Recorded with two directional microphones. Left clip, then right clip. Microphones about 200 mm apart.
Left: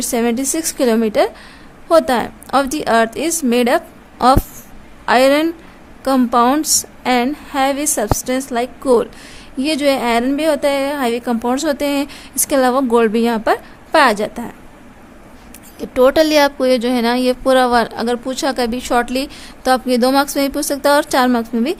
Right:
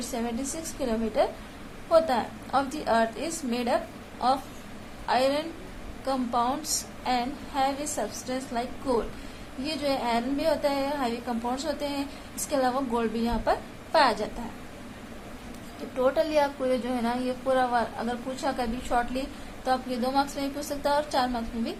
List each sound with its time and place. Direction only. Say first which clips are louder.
0.1 s a woman's voice: left 16 dB; 65° left (ahead or behind)
5.0 s a woman's voice: left 13 dB; 65° left (ahead or behind)
16.0 s a woman's voice: left 13 dB; 60° left (ahead or behind)